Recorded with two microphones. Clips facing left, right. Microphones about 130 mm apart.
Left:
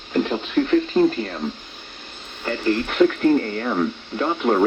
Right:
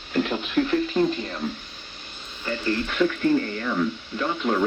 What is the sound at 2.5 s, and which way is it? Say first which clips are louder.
Speech: left 4 dB; 50° left (ahead or behind).